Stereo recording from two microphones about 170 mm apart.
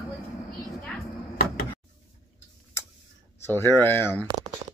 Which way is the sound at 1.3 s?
60° left (ahead or behind).